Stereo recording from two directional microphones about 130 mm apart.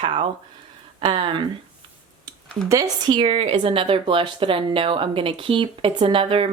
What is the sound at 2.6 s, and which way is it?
Speech, 25° right (ahead or behind).